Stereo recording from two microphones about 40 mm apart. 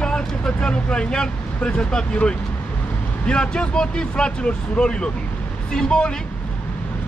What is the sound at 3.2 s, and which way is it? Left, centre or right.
Speech, left.